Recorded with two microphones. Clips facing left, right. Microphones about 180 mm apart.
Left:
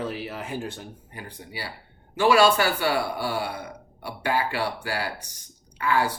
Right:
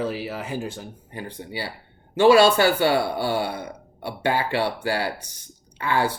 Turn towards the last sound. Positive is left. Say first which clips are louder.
# right 1 dB
turn(degrees=-25)  # may be behind; listen again after turning